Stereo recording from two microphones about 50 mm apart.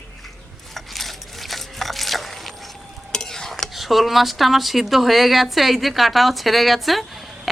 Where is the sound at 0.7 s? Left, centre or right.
Centre.